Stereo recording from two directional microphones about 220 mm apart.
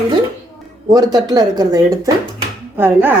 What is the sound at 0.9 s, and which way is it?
Speech, 15° right (ahead or behind).